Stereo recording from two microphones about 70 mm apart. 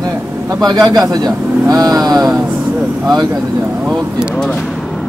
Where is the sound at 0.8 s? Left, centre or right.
Right.